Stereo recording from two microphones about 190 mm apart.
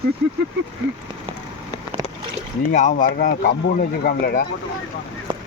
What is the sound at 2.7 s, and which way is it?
Speech, 40° left (ahead or behind).